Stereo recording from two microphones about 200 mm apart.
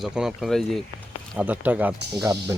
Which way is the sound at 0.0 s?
5° right (ahead or behind).